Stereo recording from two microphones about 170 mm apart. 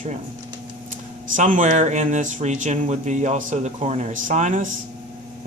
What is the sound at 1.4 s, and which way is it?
Speech, 45° right (ahead or behind).